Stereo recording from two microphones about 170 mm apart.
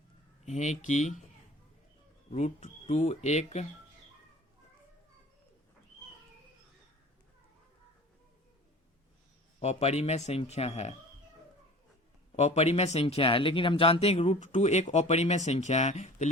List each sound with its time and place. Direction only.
0.4 s speech: 45° left (ahead or behind)
2.3 s speech: 40° left (ahead or behind)
9.6 s speech: 40° left (ahead or behind)
12.4 s speech: 40° left (ahead or behind)